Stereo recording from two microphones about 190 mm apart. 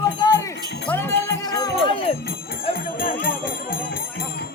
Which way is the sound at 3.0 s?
50° left (ahead or behind).